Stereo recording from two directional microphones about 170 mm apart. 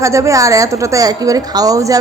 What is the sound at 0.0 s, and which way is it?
A woman's voice, 15° right (ahead or behind).